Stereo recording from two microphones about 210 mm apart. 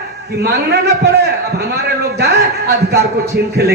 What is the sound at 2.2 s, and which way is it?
Speech, 50° right (ahead or behind).